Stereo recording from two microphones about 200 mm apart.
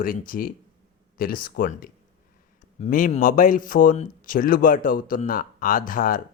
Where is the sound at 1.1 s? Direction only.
45° left (ahead or behind).